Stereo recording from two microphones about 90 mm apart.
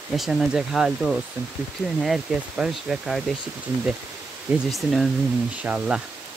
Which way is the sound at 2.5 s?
10° right (ahead or behind).